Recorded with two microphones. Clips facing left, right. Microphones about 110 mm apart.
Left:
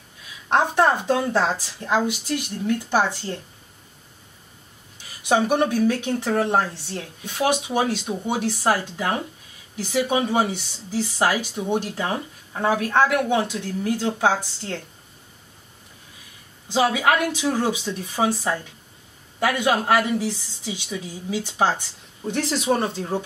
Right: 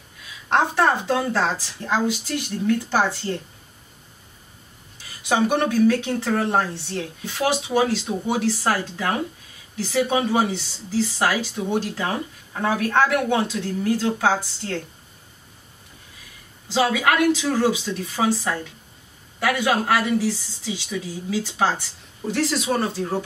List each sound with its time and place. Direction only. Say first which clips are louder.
0.5 s speech: left 1 dB; 20° left (ahead or behind)
4.9 s speech: left 2 dB; 20° left (ahead or behind)
16.7 s speech: even; 20° left (ahead or behind)